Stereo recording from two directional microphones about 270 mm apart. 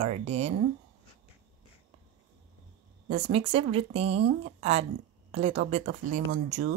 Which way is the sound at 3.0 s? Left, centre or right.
Right.